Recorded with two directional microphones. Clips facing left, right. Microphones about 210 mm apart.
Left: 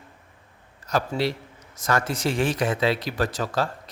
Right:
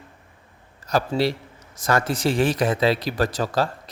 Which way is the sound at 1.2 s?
35° right (ahead or behind).